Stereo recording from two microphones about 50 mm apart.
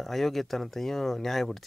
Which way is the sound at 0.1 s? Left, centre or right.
Centre.